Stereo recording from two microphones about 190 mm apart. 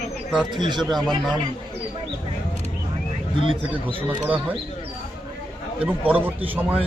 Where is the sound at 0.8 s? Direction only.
Centre (ahead or behind).